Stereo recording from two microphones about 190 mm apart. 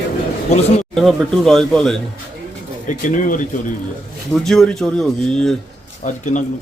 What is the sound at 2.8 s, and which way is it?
Speech, 45° left (ahead or behind).